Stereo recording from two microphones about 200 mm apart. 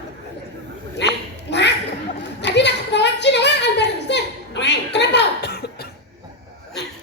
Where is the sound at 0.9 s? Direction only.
60° left (ahead or behind).